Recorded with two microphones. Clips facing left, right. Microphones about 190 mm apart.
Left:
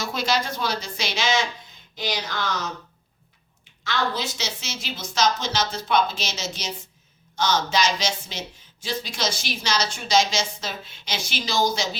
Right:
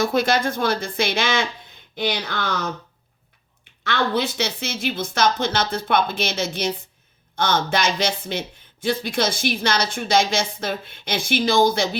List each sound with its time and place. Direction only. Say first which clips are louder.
0.0 s speech: right 6 dB; 55° right (ahead or behind)